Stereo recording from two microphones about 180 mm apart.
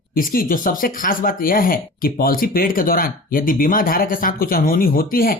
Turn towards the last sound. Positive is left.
turn(degrees=55)  # may be behind; listen again after turning